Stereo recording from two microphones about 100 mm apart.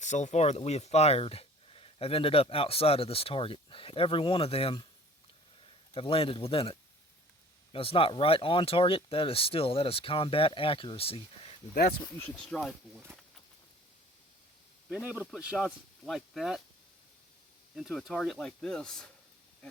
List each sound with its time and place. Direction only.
0.3 s speech: 90° left; by 11.5 s 75° left (ahead or behind)
12.2 s speech: 10° left (ahead or behind)
15.0 s speech: 10° right (ahead or behind)
17.7 s speech: centre (ahead or behind)